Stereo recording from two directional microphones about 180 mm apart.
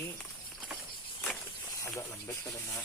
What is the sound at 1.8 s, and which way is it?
Speech, 15° left (ahead or behind).